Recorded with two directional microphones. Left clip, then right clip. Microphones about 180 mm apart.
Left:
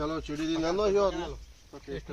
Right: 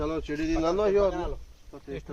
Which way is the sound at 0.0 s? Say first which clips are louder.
Right 2 dB; 25° left (ahead or behind).